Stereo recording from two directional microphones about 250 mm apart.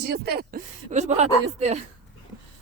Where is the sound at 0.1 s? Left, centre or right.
Right.